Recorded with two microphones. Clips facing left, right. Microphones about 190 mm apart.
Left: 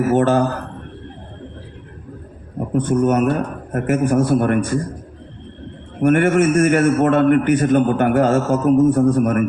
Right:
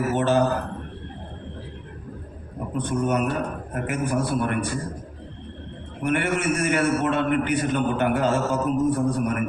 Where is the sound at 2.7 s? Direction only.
50° left (ahead or behind).